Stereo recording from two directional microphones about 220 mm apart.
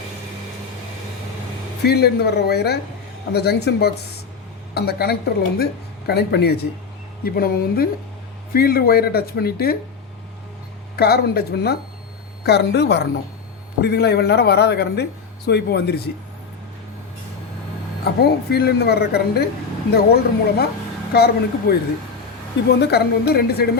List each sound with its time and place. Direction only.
1.8 s speech: 45° left (ahead or behind)
10.9 s speech: 45° left (ahead or behind)
18.2 s speech: 45° left (ahead or behind)
22.8 s speech: 45° left (ahead or behind)